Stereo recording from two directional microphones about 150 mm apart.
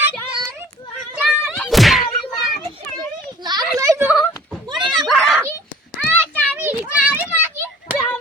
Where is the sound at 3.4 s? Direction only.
25° right (ahead or behind).